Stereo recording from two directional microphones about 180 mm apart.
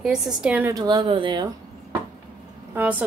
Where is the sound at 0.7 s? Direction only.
25° right (ahead or behind).